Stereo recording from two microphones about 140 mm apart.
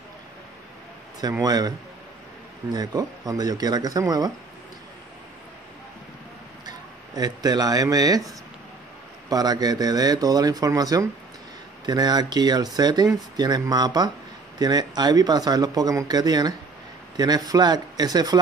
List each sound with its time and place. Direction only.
1.4 s speech: 30° right (ahead or behind)
2.7 s speech: 25° right (ahead or behind)
7.2 s speech: 30° right (ahead or behind)
9.3 s speech: 30° right (ahead or behind)